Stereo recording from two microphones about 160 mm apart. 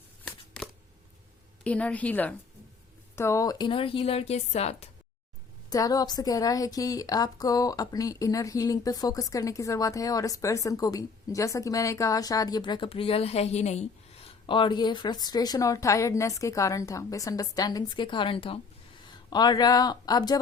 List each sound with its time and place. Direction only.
0.3 s a sound: 5° left (ahead or behind)
1.6 s a woman's voice: 10° left (ahead or behind); by 4.9 s 40° left (ahead or behind)
5.7 s a woman's voice: 25° left (ahead or behind)